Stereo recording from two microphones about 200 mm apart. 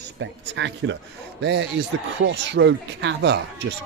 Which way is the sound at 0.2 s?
65° right (ahead or behind).